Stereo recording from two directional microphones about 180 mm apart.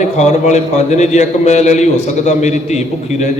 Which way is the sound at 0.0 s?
40° left (ahead or behind).